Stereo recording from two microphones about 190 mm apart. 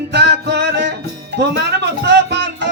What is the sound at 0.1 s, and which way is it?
Music, 65° right (ahead or behind).